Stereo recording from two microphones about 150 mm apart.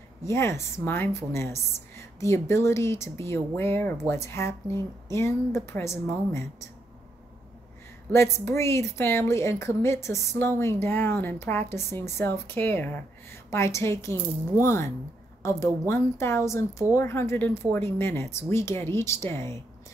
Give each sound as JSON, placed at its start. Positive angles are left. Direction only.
{"t": 0.2, "sound": "speech", "side_deg": 20}
{"t": 8.1, "sound": "a woman's voice", "side_deg": 15}